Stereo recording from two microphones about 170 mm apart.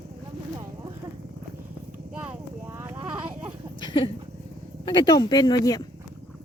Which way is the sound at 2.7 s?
15° right (ahead or behind).